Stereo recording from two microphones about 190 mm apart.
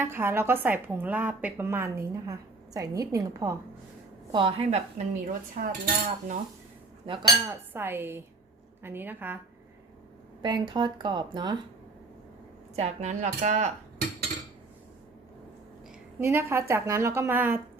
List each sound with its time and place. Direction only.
0.0 s a woman's voice: 10° right (ahead or behind); by 5.7 s 45° right (ahead or behind)
7.0 s speech: 25° right (ahead or behind)
7.7 s a woman's voice: 10° right (ahead or behind)
10.4 s speech: 25° right (ahead or behind)
12.7 s speech: 35° right (ahead or behind)
16.2 s a woman's voice: 15° right (ahead or behind)